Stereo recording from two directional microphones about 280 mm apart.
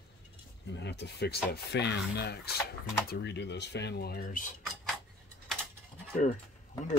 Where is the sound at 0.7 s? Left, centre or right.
Left.